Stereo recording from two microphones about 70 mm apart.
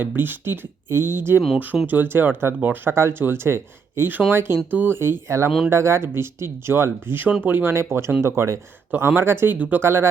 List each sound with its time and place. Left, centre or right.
0.0 s speech: right
2.9 s speech: right
9.6 s speech: right
9.8 s speech: right